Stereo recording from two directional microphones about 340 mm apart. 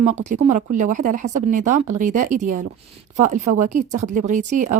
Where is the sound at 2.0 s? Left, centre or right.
Right.